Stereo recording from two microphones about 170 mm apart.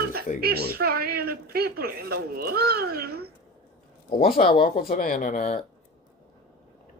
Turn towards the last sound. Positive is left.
turn(degrees=50)  # may be behind; listen again after turning